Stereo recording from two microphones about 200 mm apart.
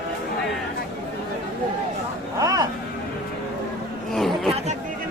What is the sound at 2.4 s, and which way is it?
Speech, 15° right (ahead or behind).